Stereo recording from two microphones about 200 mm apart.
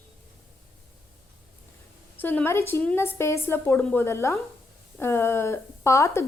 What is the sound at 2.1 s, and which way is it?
A woman's voice, 10° left (ahead or behind).